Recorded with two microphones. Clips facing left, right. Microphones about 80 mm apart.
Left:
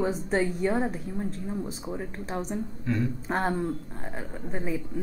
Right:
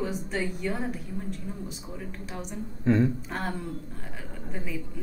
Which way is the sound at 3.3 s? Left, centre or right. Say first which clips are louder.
Left 6 dB; left.